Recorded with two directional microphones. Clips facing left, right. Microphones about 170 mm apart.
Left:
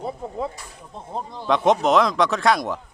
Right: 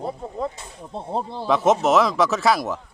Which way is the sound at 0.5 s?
30° right (ahead or behind).